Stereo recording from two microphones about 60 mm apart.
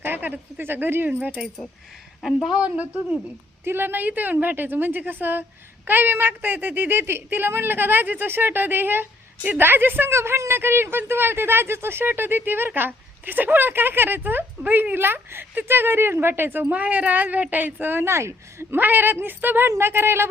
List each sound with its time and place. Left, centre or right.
0.0 s a woman's voice: right
2.2 s a woman's voice: centre
2.6 s speech: right
3.6 s a woman's voice: right
10.2 s a woman's voice: right
18.0 s a woman's voice: right
18.8 s a woman's voice: right